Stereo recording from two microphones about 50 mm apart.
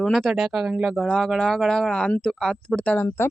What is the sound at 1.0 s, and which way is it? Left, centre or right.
Speech, centre.